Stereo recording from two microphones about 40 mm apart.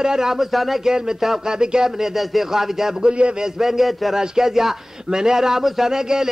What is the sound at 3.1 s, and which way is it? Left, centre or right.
Speech, right.